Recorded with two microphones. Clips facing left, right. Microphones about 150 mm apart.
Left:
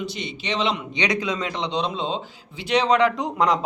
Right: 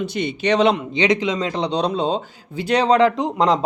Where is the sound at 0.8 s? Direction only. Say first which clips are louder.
Right 6 dB; 30° right (ahead or behind).